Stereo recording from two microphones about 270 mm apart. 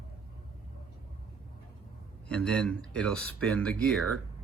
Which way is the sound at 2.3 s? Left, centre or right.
Centre.